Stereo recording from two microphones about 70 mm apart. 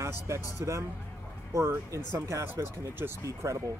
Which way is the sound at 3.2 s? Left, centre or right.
Right.